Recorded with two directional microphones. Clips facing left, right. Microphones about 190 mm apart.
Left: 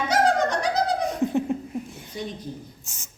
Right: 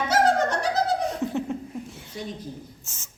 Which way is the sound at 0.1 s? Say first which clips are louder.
Even; 5° right (ahead or behind).